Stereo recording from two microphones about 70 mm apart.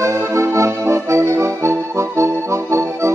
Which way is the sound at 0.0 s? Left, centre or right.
Right.